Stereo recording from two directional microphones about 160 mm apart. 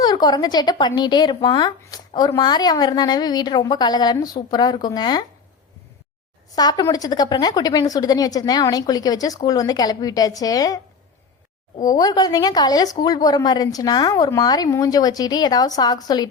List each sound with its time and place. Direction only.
0.0 s a woman's voice: 25° left (ahead or behind)
6.6 s a woman's voice: 25° left (ahead or behind)
11.9 s a woman's voice: 25° left (ahead or behind)